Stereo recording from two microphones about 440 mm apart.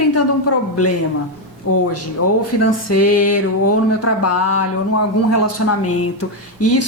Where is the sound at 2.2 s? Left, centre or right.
Left.